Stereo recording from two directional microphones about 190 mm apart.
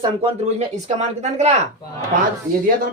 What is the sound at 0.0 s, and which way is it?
Speech, 35° right (ahead or behind).